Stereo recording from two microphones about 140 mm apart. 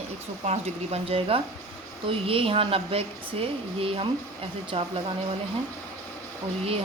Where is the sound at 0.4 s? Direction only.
50° right (ahead or behind).